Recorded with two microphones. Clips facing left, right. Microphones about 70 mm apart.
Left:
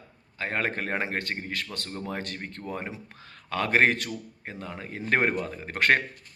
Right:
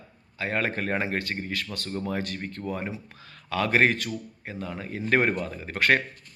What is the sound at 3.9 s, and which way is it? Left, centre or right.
Speech, left.